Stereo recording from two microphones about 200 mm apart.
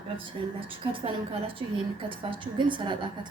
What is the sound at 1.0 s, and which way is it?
A woman's voice, 25° right (ahead or behind).